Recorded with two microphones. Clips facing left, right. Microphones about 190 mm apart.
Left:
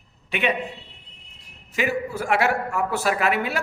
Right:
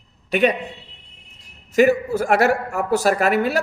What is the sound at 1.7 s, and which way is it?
Speech, 45° right (ahead or behind).